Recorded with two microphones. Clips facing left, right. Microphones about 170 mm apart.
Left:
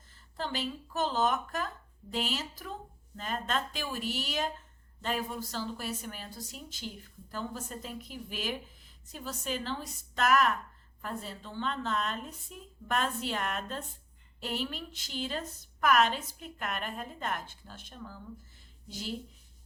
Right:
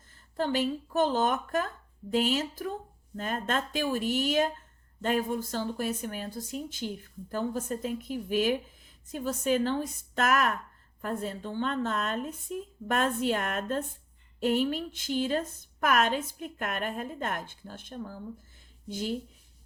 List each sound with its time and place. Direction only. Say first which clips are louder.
0.3 s a woman's voice: right 8 dB; 50° right (ahead or behind)